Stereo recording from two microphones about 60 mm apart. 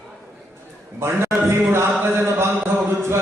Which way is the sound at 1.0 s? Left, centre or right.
Right.